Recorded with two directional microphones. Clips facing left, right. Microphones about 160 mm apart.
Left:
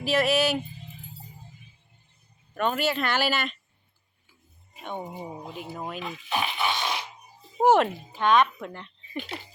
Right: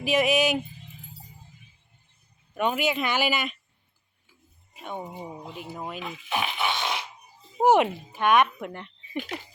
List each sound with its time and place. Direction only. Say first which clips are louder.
0.0 s speech: right 1 dB; 15° right (ahead or behind)
2.6 s speech: even; 15° right (ahead or behind)
4.8 s speech: left 1 dB; 5° right (ahead or behind)
5.0 s speech: left 1 dB; 5° left (ahead or behind)
6.3 s dog: even; 20° right (ahead or behind)
7.6 s speech: even; 15° right (ahead or behind)